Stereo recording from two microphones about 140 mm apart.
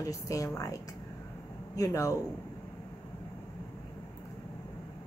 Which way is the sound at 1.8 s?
25° left (ahead or behind).